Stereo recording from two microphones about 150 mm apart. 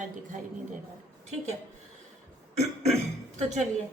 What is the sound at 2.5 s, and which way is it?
Cough, 45° right (ahead or behind).